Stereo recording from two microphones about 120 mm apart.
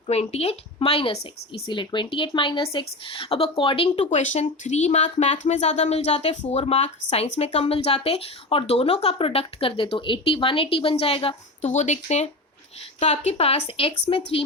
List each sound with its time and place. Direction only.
0.1 s speech: 60° left (ahead or behind)
1.7 s a woman's voice: 40° left (ahead or behind)
4.0 s speech: 85° left; by 11.3 s 50° left (ahead or behind)
11.6 s speech: 75° left (ahead or behind); by 14.2 s 50° left (ahead or behind)